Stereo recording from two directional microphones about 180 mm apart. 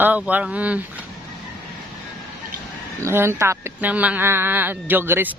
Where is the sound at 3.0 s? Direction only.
15° right (ahead or behind).